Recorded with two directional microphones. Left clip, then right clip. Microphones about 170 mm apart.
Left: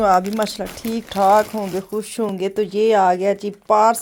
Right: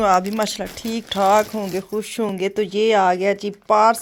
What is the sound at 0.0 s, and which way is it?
Speech, 5° left (ahead or behind).